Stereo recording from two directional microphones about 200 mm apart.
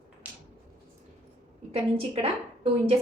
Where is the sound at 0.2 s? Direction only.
5° right (ahead or behind).